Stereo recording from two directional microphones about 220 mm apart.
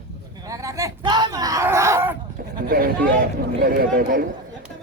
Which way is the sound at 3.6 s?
40° right (ahead or behind).